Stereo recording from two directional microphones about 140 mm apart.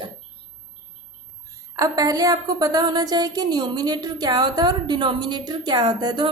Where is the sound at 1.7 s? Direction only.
25° right (ahead or behind).